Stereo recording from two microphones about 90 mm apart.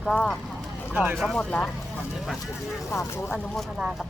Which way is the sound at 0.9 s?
15° right (ahead or behind).